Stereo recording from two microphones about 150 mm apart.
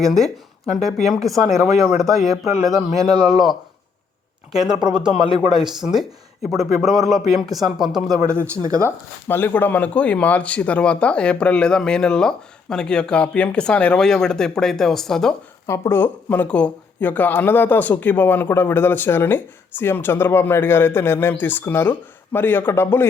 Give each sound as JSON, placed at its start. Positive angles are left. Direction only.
{"t": 0.0, "sound": "speech", "side_deg": 0}
{"t": 8.6, "sound": "speech", "side_deg": -25}
{"t": 9.2, "sound": "speech", "side_deg": 10}
{"t": 15.6, "sound": "speech", "side_deg": 20}